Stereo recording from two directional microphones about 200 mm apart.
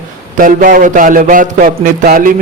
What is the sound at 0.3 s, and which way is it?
A man's voice, 40° right (ahead or behind).